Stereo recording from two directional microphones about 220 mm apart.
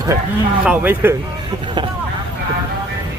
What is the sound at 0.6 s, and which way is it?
Speech, 5° right (ahead or behind).